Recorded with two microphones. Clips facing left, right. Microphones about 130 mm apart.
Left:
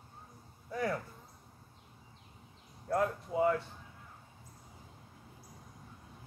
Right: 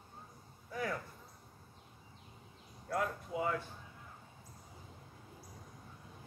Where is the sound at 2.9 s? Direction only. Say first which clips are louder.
Left 5 dB; 35° left (ahead or behind).